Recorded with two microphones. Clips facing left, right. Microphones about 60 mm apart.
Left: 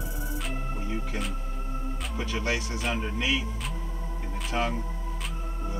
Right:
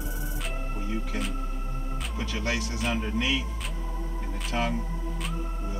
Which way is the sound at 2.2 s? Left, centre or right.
Centre.